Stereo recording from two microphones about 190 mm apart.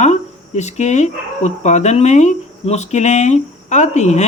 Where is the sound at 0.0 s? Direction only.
35° left (ahead or behind).